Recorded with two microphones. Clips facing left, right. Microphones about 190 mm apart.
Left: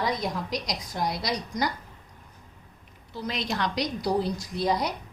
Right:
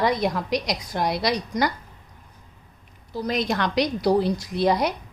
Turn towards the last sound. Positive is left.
turn(degrees=-65)  # may be behind; listen again after turning